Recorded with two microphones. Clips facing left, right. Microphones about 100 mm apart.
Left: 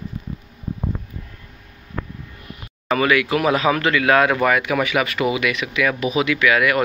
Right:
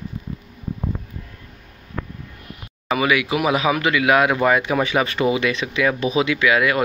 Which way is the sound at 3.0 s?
15° right (ahead or behind).